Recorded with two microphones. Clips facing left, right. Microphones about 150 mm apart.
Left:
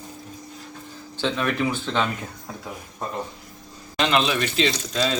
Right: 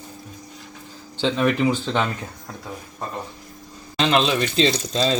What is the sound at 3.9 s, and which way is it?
Speech, 30° right (ahead or behind).